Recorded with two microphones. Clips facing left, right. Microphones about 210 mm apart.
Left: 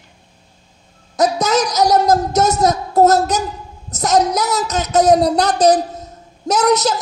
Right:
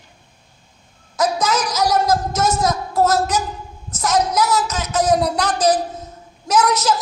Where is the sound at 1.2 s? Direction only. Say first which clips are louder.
Left 4 dB; 40° left (ahead or behind).